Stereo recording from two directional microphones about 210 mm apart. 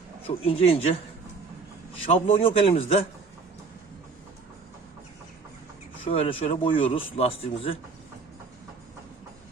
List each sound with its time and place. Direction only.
0.3 s speech: 25° left (ahead or behind)
2.0 s speech: 25° left (ahead or behind)
6.1 s speech: 25° left (ahead or behind)